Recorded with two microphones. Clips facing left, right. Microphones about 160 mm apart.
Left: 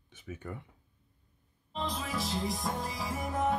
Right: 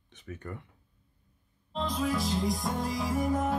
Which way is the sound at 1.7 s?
Centre (ahead or behind).